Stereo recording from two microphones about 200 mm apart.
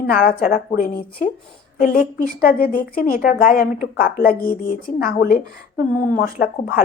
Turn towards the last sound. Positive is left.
turn(degrees=45)  # may be behind; listen again after turning